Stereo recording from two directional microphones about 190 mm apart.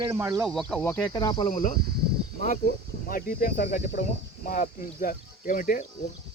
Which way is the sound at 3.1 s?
50° left (ahead or behind).